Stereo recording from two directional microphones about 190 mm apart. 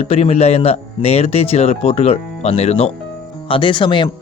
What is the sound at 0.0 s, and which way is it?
Speech, 35° left (ahead or behind).